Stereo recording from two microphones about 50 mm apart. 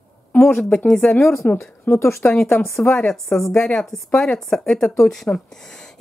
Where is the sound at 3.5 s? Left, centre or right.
Centre.